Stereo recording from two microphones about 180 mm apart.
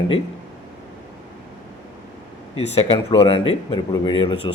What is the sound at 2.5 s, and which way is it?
Speech, 35° left (ahead or behind).